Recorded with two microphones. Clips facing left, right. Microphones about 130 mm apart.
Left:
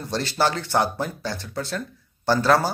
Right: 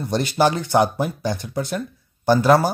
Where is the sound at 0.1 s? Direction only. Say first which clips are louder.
Right 4 dB; 15° right (ahead or behind).